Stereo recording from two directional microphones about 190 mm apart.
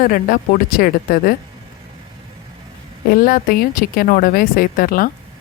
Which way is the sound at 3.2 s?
50° left (ahead or behind).